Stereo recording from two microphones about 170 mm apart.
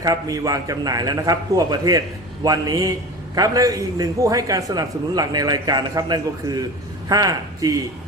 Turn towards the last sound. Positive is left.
turn(degrees=-20)  # may be behind; listen again after turning